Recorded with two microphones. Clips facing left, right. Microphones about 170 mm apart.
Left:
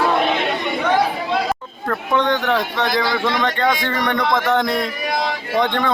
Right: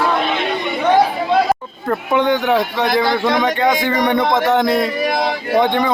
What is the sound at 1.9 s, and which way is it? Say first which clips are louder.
Speech: right 3 dB; 10° right (ahead or behind).